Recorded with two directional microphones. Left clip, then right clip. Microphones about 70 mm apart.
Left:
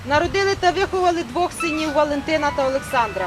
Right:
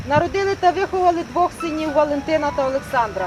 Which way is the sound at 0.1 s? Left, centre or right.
Left.